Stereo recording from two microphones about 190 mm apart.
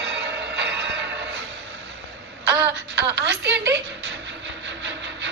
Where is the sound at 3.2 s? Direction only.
70° right (ahead or behind).